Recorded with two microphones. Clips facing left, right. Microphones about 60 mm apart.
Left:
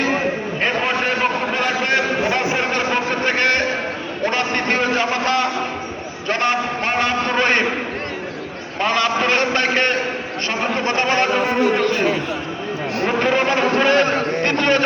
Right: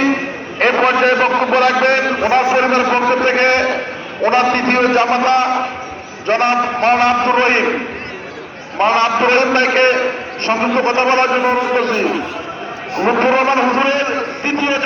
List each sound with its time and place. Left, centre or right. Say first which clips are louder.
0.6 s a man's voice: right 9 dB; right
8.8 s a man's voice: right 6 dB; right
13.1 s a man's voice: right 6 dB; right; by 14.8 s centre